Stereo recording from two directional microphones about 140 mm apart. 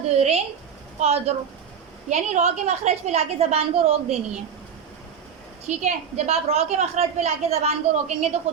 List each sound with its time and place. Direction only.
0.2 s a sound: 45° right (ahead or behind)
0.9 s a woman's voice: 50° right (ahead or behind)
5.6 s a woman's voice: 50° right (ahead or behind)